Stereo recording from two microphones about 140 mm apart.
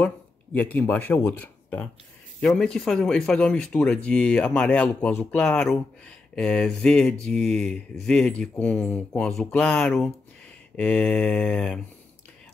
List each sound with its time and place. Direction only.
0.0 s speech: 10° left (ahead or behind)
9.4 s mantra: 5° left (ahead or behind)